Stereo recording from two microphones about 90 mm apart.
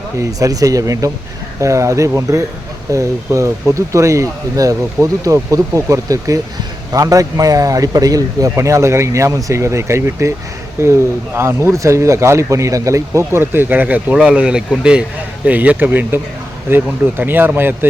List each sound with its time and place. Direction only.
0.2 s speech: 40° right (ahead or behind); by 17.7 s 25° right (ahead or behind)